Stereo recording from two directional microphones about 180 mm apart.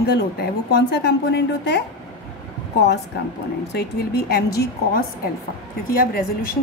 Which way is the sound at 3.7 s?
60° left (ahead or behind).